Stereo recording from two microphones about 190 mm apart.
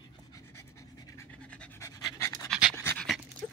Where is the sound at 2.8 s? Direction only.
15° left (ahead or behind).